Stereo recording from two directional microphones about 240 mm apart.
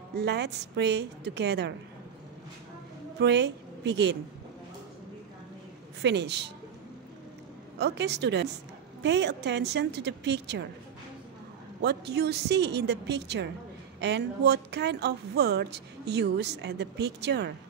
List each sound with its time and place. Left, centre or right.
0.1 s speech: right
3.2 s a woman's voice: right
6.0 s speech: right
7.8 s speech: right
11.8 s speech: right